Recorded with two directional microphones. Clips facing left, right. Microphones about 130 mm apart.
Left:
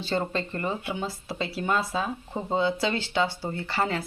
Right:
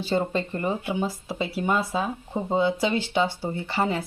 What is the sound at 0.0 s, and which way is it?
Speech, 15° right (ahead or behind).